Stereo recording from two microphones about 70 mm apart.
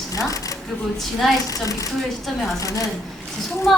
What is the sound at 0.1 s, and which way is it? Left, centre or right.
Speech, left.